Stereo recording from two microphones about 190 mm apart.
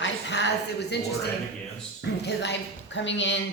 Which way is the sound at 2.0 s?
65° left (ahead or behind).